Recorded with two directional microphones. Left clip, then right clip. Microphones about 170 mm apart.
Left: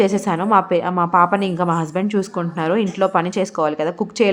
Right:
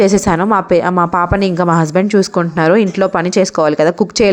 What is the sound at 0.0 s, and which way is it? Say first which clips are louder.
A woman's voice: right 6 dB; 30° right (ahead or behind).